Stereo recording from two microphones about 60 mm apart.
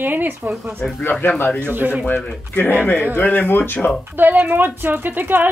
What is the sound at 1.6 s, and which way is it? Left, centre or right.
Speech, right.